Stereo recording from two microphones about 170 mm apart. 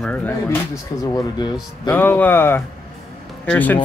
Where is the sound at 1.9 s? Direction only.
10° left (ahead or behind).